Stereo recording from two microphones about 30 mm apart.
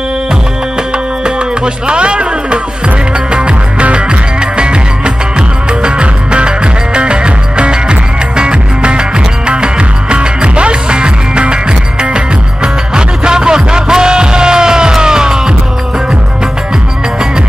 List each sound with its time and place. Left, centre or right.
0.9 s music: right
12.6 s music: right